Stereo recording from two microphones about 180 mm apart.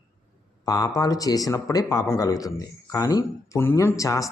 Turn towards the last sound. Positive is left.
turn(degrees=20)  # may be behind; listen again after turning